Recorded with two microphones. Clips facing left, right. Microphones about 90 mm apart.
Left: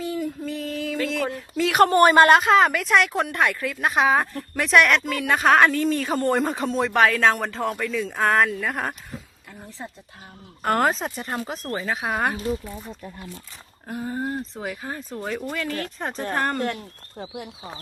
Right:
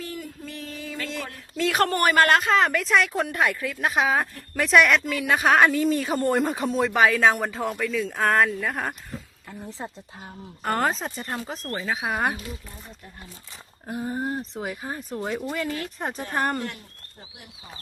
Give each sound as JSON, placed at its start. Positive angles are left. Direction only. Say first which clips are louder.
{"t": 0.0, "sound": "a sound", "louder": "left 8 dB", "side_deg": 10}
{"t": 1.5, "sound": "speech", "louder": "left 6 dB", "side_deg": 5}
{"t": 9.5, "sound": "speech", "louder": "right 3 dB", "side_deg": -20}
{"t": 10.6, "sound": "speech", "louder": "left 3 dB", "side_deg": 0}
{"t": 13.8, "sound": "speech", "louder": "even", "side_deg": -10}
{"t": 17.2, "sound": "speech", "louder": "left 14 dB", "side_deg": 90}